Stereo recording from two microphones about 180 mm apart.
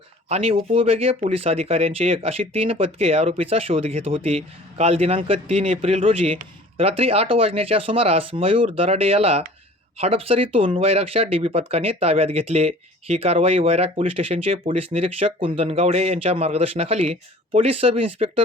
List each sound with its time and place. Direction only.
0.3 s speech: 35° right (ahead or behind)